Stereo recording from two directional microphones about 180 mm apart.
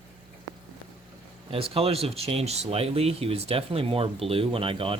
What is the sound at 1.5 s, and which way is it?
Speech, 30° right (ahead or behind).